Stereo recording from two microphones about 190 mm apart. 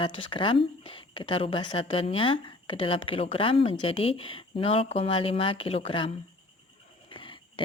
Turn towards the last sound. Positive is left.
turn(degrees=25)  # may be behind; listen again after turning